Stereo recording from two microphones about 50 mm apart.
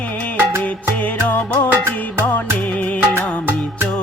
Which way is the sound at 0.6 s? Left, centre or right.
Left.